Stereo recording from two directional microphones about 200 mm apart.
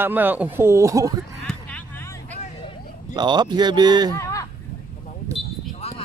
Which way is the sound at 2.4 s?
35° left (ahead or behind).